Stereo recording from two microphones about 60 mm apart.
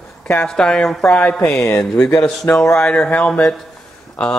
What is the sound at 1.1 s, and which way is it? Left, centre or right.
Speech, left.